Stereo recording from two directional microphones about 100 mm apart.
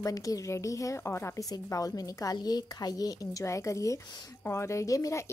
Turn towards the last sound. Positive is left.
turn(degrees=30)  # may be behind; listen again after turning